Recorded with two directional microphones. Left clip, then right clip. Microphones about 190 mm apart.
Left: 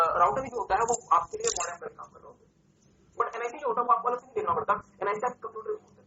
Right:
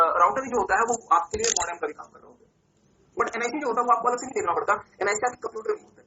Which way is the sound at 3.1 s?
20° right (ahead or behind).